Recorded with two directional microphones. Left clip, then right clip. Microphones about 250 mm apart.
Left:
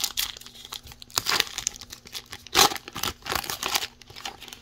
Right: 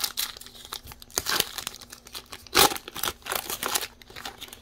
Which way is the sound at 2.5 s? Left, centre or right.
Centre.